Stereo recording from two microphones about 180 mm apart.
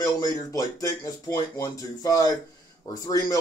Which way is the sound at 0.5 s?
20° left (ahead or behind).